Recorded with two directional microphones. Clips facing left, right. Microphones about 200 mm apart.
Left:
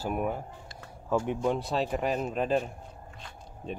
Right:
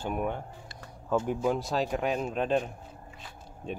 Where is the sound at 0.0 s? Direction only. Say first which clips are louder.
Left 1 dB; 5° left (ahead or behind).